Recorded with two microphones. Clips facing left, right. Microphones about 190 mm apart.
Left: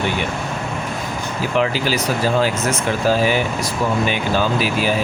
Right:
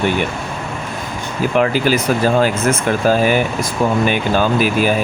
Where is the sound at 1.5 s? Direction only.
50° right (ahead or behind).